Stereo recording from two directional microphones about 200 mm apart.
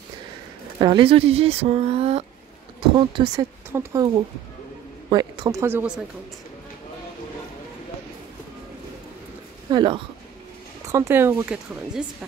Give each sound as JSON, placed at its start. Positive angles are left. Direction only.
{"t": 0.7, "sound": "speech", "side_deg": -25}
{"t": 5.1, "sound": "speech", "side_deg": -15}
{"t": 9.7, "sound": "speech", "side_deg": -25}